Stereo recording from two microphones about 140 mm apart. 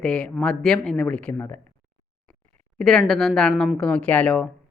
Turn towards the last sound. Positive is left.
turn(degrees=5)  # may be behind; listen again after turning